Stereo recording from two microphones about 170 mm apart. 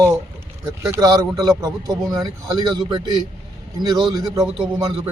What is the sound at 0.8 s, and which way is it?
Speech, 20° right (ahead or behind).